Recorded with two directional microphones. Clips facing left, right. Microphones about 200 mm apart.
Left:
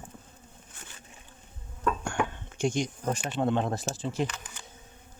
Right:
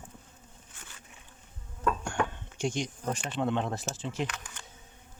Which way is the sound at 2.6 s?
45° left (ahead or behind).